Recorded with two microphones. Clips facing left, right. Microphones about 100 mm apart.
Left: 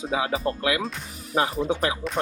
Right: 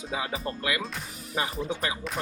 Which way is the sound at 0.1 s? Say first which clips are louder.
Left 6 dB; 90° left.